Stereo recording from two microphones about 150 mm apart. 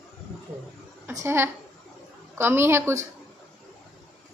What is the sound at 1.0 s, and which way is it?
A woman's voice, 15° right (ahead or behind).